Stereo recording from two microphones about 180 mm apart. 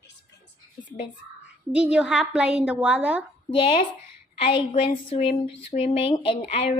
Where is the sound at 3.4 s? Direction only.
30° left (ahead or behind).